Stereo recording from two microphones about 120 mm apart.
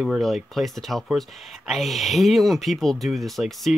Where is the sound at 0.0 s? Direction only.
Centre (ahead or behind).